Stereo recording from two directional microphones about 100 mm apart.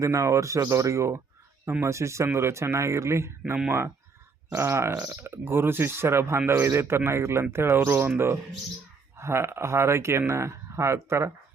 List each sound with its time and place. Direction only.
0.0 s a man's voice: 30° right (ahead or behind)